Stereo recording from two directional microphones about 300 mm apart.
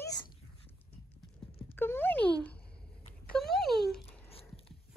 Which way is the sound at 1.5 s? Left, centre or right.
Left.